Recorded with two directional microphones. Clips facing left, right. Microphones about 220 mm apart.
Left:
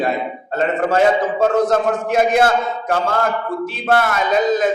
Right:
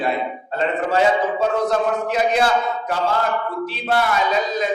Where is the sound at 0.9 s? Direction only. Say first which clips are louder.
Left 2 dB; 45° left (ahead or behind).